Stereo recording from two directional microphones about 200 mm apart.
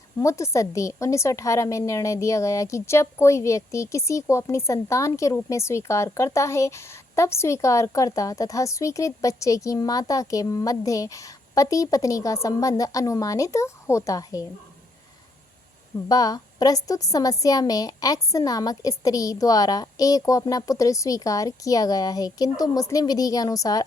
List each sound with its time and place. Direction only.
0.2 s a woman's voice: 15° left (ahead or behind)
16.0 s a woman's voice: 20° left (ahead or behind)